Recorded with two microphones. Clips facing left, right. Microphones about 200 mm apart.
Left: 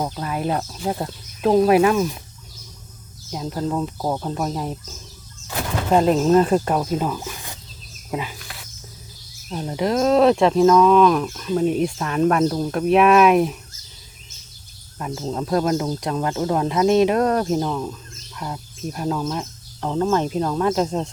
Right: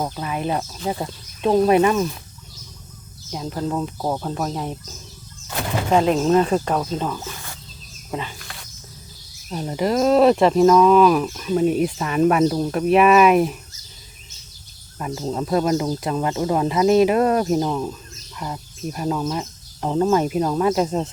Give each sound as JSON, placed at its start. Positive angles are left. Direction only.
{"t": 0.0, "sound": "speech", "side_deg": 0}
{"t": 3.3, "sound": "speech", "side_deg": 0}
{"t": 5.9, "sound": "speech", "side_deg": 0}
{"t": 8.1, "sound": "wild animals", "side_deg": 5}
{"t": 9.5, "sound": "speech", "side_deg": 0}
{"t": 14.9, "sound": "speech", "side_deg": 0}